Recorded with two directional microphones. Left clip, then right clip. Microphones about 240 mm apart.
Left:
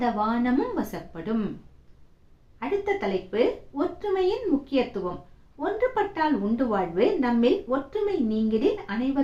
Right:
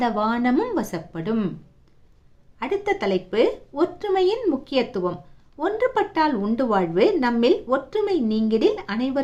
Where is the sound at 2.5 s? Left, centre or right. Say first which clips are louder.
Right 3 dB; right.